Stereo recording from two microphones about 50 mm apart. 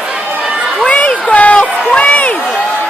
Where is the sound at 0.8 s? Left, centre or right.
Left.